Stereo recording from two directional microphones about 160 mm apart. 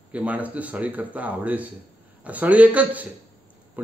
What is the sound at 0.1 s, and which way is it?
A man's voice, 10° right (ahead or behind).